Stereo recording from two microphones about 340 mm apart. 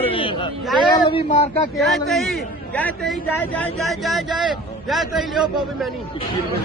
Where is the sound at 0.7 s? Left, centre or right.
Centre.